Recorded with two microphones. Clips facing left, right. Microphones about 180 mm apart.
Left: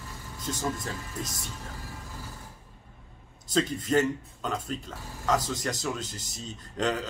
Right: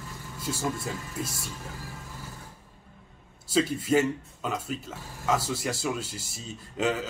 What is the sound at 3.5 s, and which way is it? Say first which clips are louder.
Speech: right 1 dB; 10° right (ahead or behind).